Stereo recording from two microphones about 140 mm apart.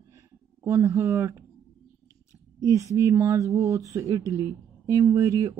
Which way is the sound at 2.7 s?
20° right (ahead or behind).